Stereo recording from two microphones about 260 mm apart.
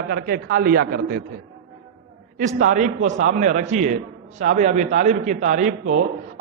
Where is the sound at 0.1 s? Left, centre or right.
Right.